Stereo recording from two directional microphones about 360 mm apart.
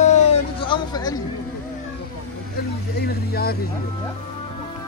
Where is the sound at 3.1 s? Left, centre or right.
Left.